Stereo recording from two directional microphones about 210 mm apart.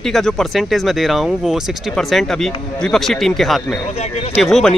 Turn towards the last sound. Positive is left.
turn(degrees=0)  # may be behind; listen again after turning